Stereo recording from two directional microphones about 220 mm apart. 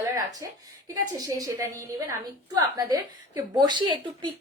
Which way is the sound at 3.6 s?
20° right (ahead or behind).